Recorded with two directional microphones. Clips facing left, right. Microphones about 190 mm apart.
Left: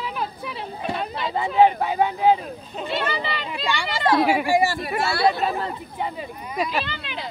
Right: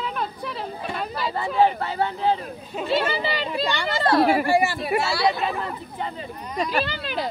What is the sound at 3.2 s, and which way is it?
Speech, 35° right (ahead or behind).